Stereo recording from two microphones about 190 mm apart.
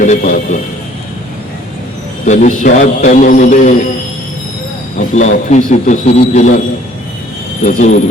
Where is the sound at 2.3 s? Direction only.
40° left (ahead or behind).